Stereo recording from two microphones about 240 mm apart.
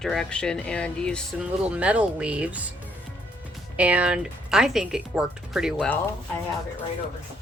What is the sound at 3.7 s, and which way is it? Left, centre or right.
Speech, centre.